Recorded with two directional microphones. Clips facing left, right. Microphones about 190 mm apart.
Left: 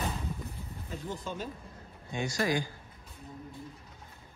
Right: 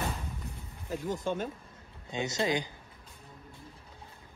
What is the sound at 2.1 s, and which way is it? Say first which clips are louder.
Speech: even; 20° right (ahead or behind).